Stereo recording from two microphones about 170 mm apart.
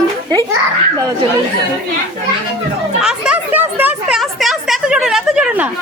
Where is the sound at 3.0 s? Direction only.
5° right (ahead or behind).